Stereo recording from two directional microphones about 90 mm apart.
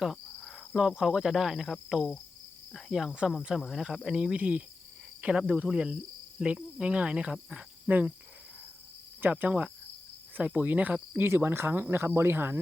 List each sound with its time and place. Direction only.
0.3 s insect: 10° left (ahead or behind)
0.8 s speech: 5° right (ahead or behind)
9.2 s speech: 20° right (ahead or behind)